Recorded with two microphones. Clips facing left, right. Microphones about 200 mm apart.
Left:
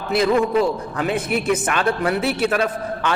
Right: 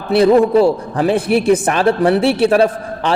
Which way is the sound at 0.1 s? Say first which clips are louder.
Right 7 dB; 35° right (ahead or behind).